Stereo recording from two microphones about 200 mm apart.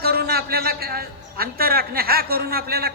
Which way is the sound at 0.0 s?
50° right (ahead or behind).